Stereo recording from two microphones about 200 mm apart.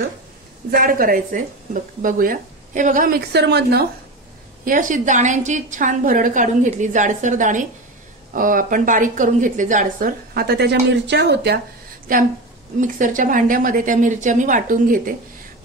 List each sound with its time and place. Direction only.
0.7 s a woman's voice: 45° right (ahead or behind)
4.6 s a woman's voice: 40° right (ahead or behind)
12.1 s a woman's voice: 45° right (ahead or behind)